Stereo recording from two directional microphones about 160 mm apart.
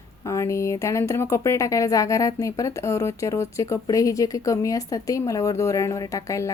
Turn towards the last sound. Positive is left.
turn(degrees=20)  # may be behind; listen again after turning